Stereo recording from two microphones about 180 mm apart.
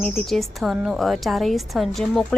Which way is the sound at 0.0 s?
Centre (ahead or behind).